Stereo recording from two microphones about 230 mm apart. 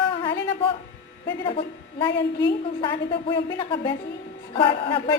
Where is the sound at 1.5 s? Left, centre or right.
Left.